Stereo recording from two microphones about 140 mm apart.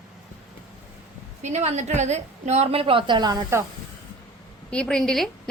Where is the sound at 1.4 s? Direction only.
55° right (ahead or behind); by 3.6 s 25° right (ahead or behind).